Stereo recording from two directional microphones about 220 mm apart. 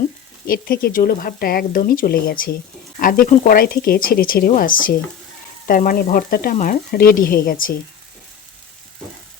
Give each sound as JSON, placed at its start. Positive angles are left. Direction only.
{"t": 0.4, "sound": "speech", "side_deg": 40}